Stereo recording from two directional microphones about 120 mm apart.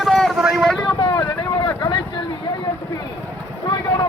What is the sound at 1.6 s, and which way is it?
Vehicle, 45° left (ahead or behind).